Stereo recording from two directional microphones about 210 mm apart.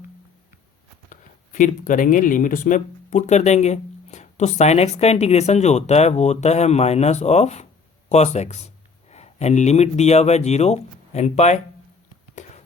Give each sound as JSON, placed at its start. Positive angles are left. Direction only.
{"t": 1.1, "sound": "speech", "side_deg": 35}